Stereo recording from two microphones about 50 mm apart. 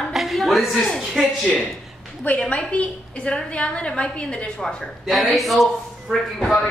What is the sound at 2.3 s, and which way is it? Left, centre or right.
A woman's voice, left.